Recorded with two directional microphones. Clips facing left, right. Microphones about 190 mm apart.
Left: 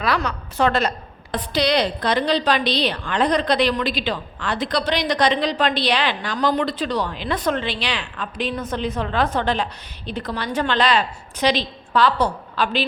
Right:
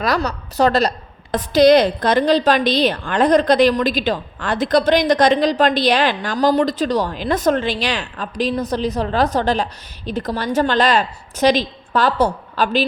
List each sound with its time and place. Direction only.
0.0 s a woman's voice: 40° right (ahead or behind)